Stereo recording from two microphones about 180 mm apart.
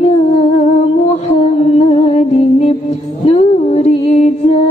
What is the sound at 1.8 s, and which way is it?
Music, 35° left (ahead or behind).